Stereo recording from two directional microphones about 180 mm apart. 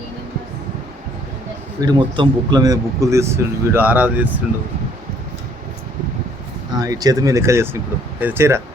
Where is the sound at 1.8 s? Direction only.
25° right (ahead or behind).